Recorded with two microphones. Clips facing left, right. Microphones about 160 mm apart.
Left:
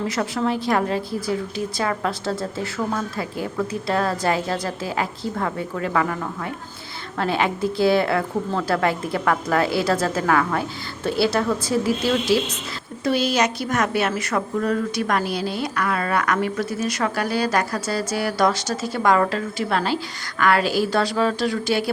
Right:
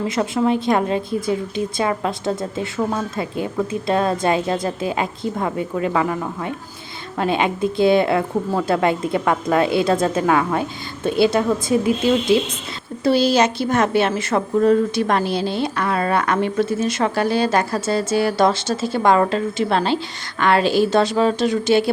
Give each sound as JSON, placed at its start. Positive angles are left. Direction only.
{"t": 0.1, "sound": "a woman's voice", "side_deg": -20}